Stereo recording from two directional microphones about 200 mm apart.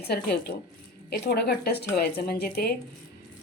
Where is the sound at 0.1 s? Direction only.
55° left (ahead or behind).